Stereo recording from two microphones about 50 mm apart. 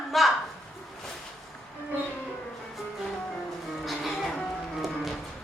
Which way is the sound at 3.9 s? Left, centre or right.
Centre.